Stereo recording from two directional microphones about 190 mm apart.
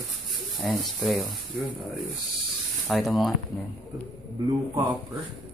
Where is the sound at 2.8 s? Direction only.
Centre (ahead or behind).